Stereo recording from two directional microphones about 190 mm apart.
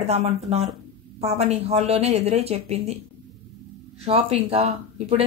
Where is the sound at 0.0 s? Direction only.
35° right (ahead or behind).